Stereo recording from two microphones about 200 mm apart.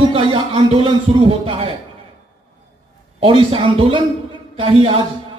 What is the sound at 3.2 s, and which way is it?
A man's voice, 25° right (ahead or behind).